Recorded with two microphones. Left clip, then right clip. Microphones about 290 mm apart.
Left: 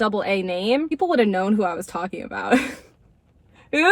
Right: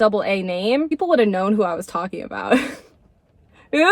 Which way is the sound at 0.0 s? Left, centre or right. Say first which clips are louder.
Right 4 dB; centre.